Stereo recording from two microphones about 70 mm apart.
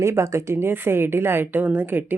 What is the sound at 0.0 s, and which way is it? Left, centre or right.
A woman's voice, right.